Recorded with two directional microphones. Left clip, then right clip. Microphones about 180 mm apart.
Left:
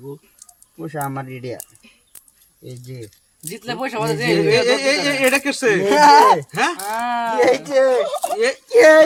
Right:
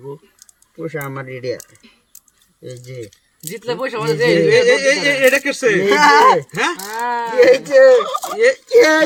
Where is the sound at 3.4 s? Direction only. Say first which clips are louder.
Right 3 dB; 40° left (ahead or behind).